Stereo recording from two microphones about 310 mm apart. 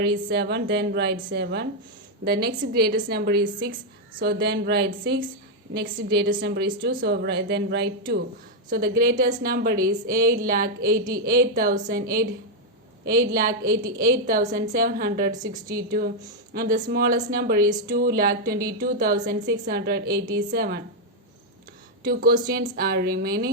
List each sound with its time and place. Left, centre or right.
0.3 s a woman's voice: right
13.1 s a woman's voice: right
22.0 s a woman's voice: right